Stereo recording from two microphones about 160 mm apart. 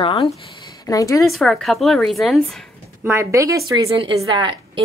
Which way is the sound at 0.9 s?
20° left (ahead or behind).